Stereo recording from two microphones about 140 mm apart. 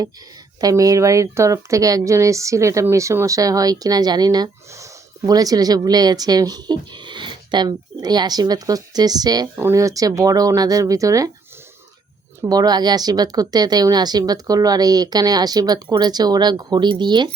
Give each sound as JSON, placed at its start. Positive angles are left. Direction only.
{"t": 0.6, "sound": "speech", "side_deg": -25}
{"t": 12.4, "sound": "speech", "side_deg": -25}